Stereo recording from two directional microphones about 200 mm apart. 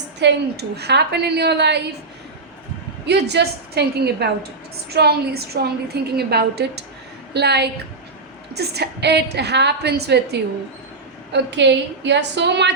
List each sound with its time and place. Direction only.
0.2 s a woman's voice: 55° right (ahead or behind)
3.1 s a woman's voice: 55° right (ahead or behind)